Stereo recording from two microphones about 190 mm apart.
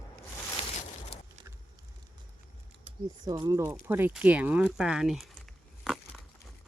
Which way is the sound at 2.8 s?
20° right (ahead or behind).